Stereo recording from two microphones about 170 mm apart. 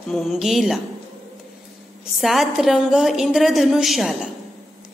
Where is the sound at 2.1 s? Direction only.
Centre (ahead or behind).